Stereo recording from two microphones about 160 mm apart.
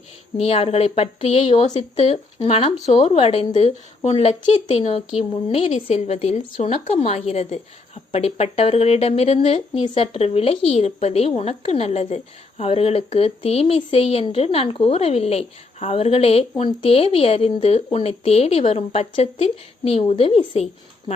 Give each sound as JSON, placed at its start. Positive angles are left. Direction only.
{"t": 0.3, "sound": "speech", "side_deg": 40}